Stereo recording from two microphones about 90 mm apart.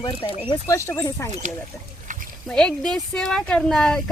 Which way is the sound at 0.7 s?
30° left (ahead or behind).